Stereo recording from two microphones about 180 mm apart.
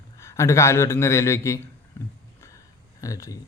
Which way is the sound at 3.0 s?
20° left (ahead or behind).